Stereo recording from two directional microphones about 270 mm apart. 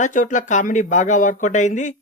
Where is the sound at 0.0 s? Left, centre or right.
Left.